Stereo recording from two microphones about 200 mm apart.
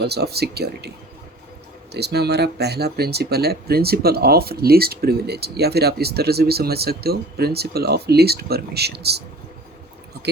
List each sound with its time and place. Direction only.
0.0 s speech: 55° right (ahead or behind)
1.9 s speech: 55° right (ahead or behind)